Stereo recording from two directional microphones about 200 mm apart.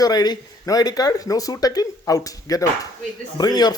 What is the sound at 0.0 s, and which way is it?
Speech, 20° left (ahead or behind).